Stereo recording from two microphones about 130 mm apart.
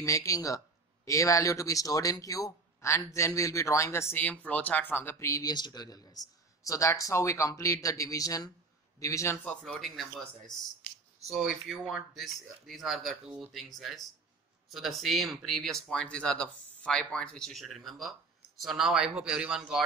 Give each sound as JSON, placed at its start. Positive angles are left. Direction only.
{"t": 0.0, "sound": "speech", "side_deg": 25}